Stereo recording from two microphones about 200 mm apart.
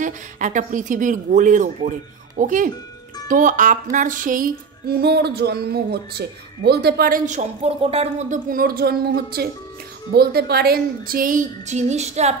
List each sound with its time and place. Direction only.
0.0 s speech: 40° right (ahead or behind)
3.9 s music: 40° right (ahead or behind)